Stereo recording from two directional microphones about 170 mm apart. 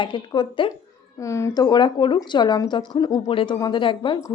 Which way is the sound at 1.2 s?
15° left (ahead or behind).